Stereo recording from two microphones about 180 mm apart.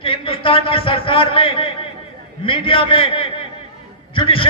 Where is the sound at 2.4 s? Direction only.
30° left (ahead or behind).